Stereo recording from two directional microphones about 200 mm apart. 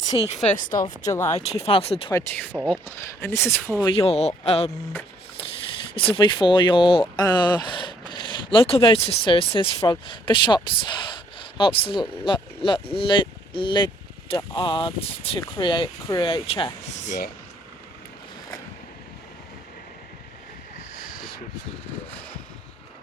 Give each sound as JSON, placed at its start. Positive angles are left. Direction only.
{"t": 0.4, "sound": "speech", "side_deg": 40}
{"t": 1.0, "sound": "speech", "side_deg": 15}
{"t": 1.3, "sound": "speech", "side_deg": 30}
{"t": 2.1, "sound": "speech", "side_deg": 10}
{"t": 5.9, "sound": "speech", "side_deg": 25}